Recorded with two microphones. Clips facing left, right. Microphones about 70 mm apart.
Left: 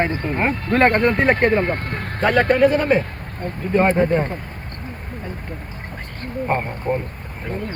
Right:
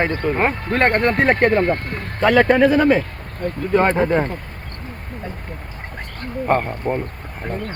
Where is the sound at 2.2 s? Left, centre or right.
Right.